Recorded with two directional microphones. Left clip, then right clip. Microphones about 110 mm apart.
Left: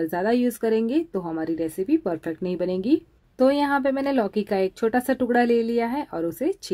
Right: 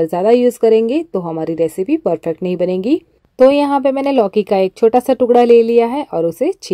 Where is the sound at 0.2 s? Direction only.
35° right (ahead or behind).